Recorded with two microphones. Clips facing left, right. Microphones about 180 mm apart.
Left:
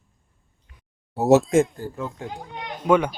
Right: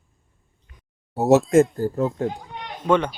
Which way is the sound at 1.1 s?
Centre (ahead or behind).